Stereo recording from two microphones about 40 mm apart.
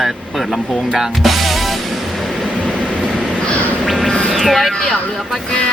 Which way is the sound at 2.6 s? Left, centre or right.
Left.